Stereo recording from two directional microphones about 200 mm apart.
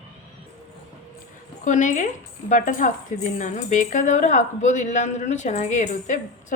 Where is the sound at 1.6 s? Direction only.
40° left (ahead or behind).